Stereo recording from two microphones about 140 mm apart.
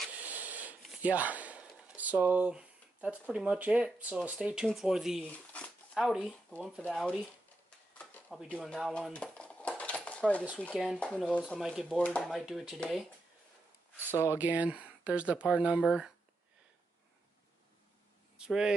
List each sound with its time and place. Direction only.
0.1 s a sound: 10° right (ahead or behind)
0.8 s speech: 10° right (ahead or behind)
5.2 s a sound: 10° left (ahead or behind)
5.9 s speech: 5° right (ahead or behind)
8.5 s dishes: 5° left (ahead or behind)
10.6 s speech: 5° left (ahead or behind)
14.1 s speech: 20° left (ahead or behind)
14.4 s speech: 10° right (ahead or behind)
18.4 s speech: 5° right (ahead or behind)